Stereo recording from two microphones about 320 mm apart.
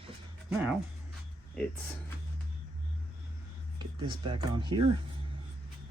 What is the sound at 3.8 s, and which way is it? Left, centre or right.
Speech, centre.